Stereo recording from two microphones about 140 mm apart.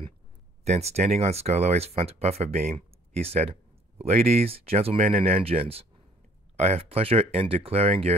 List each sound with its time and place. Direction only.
0.7 s speech: 50° right (ahead or behind)